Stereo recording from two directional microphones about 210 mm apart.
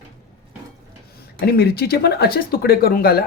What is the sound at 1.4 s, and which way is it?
Speech, 50° left (ahead or behind).